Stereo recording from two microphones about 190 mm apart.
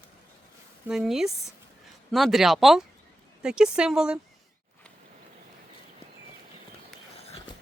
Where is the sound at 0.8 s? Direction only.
Centre (ahead or behind).